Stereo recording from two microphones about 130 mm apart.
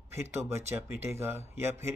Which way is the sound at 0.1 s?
20° right (ahead or behind).